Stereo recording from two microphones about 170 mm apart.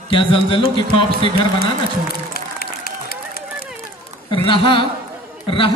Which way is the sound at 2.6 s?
60° left (ahead or behind).